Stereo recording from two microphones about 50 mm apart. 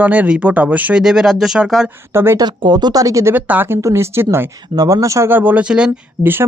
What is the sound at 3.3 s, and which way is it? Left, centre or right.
Speech, right.